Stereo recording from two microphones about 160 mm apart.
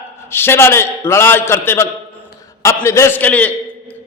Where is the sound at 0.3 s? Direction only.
15° left (ahead or behind).